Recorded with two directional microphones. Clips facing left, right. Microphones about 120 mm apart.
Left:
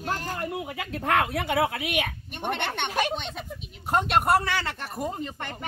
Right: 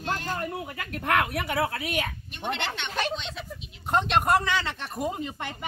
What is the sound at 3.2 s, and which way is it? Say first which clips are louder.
Speech: left 2 dB; 50° left (ahead or behind).